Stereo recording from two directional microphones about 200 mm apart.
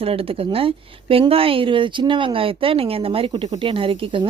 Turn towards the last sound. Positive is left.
turn(degrees=-25)  # may be behind; listen again after turning